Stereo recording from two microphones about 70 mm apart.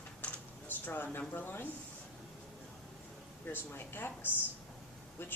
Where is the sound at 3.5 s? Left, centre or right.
Left.